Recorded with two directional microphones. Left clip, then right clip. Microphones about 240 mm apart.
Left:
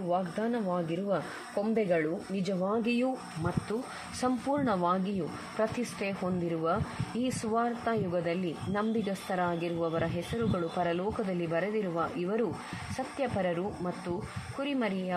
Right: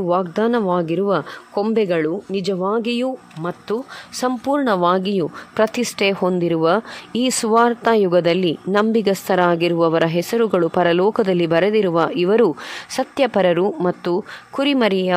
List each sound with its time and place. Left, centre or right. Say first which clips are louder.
0.1 s speech: right 12 dB; right